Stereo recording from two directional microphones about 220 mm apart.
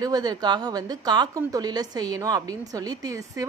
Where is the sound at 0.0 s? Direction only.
20° right (ahead or behind).